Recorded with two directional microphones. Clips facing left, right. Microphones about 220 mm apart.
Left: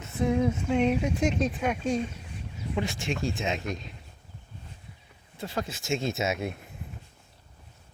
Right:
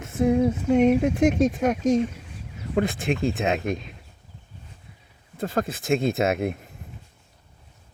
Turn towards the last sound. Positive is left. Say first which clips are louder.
# right 6 dB
turn(degrees=-55)  # may be behind; listen again after turning